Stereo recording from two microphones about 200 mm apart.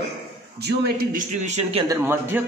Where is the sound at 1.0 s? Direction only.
40° right (ahead or behind).